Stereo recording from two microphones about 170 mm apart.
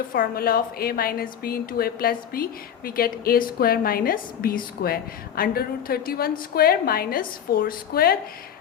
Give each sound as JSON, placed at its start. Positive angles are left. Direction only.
{"t": 0.1, "sound": "a woman's voice", "side_deg": 60}